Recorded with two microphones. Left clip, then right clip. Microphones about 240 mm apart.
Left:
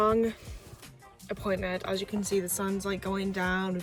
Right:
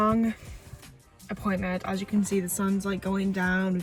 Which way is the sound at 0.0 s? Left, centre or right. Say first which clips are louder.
Even; centre.